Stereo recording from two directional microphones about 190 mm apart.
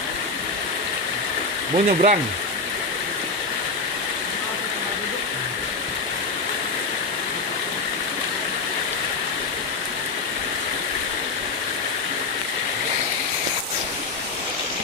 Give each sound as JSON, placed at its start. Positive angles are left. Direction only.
{"t": 1.7, "sound": "speech", "side_deg": -40}